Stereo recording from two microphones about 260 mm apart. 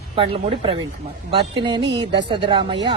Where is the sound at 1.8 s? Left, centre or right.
Right.